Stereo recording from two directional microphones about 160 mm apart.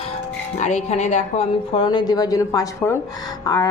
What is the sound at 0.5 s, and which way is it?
Speech, 45° left (ahead or behind).